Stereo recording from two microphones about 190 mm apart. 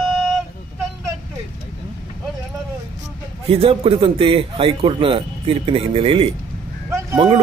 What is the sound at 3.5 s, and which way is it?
A man's voice, 30° right (ahead or behind).